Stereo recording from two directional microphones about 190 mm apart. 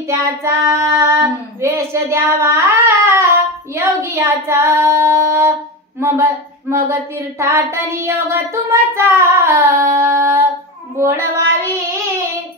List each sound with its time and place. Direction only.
0.1 s child singing: 15° right (ahead or behind)
5.9 s speech: 15° right (ahead or behind)
6.9 s child singing: 15° right (ahead or behind)